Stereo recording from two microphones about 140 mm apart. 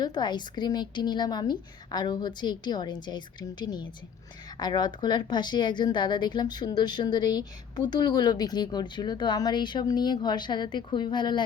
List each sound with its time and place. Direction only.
0.0 s a woman's voice: 30° left (ahead or behind)